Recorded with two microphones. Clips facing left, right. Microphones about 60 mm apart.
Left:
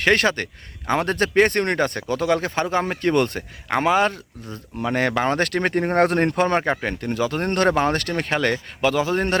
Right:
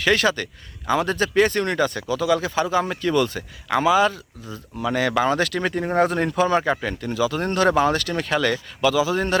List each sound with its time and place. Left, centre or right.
0.0 s speech: left